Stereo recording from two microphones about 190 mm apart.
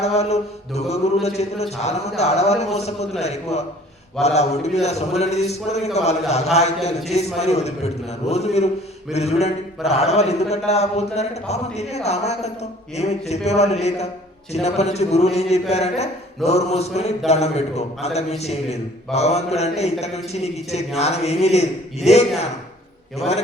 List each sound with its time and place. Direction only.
0.0 s mantra: 35° left (ahead or behind)